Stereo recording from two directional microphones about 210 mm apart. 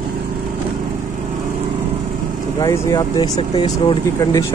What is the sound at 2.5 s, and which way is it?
Speech, 15° left (ahead or behind).